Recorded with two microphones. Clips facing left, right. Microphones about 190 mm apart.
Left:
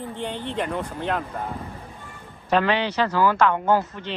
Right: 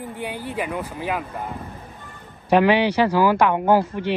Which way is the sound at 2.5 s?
10° right (ahead or behind).